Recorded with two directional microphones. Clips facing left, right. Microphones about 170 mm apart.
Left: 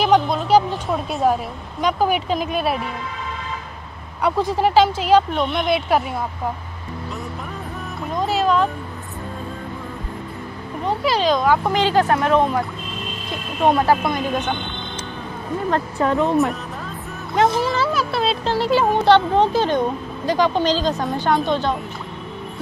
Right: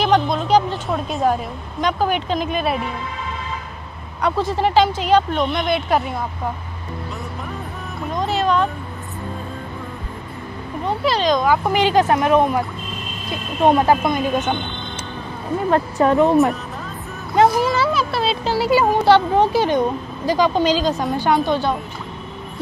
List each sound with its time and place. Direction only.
0.0 s a woman's voice: 5° left (ahead or behind)
4.2 s a woman's voice: 10° left (ahead or behind)
8.3 s a sound: 5° left (ahead or behind)
11.1 s a woman's voice: 5° left (ahead or behind)
11.8 s speech: 15° right (ahead or behind)
13.7 s speech: 20° right (ahead or behind)
15.7 s speech: 20° right (ahead or behind)
17.4 s speech: 5° right (ahead or behind)